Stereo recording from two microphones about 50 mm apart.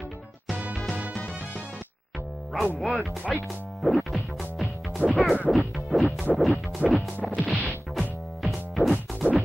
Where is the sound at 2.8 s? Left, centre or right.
Centre.